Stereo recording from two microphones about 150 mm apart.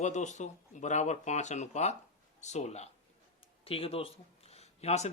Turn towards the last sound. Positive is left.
turn(degrees=45)  # may be behind; listen again after turning